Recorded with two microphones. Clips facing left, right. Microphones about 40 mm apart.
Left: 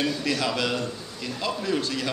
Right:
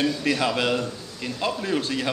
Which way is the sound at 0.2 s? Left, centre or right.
Right.